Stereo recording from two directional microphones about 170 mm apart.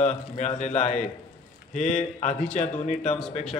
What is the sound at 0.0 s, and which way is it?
A man's voice, 45° left (ahead or behind).